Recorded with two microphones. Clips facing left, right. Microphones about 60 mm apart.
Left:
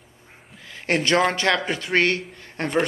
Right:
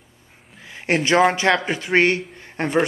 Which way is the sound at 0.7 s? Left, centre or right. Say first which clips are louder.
Right 2 dB; centre.